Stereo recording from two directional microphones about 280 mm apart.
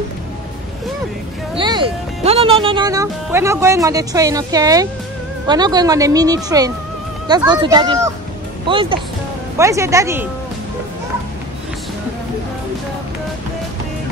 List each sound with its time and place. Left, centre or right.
1.6 s speech: centre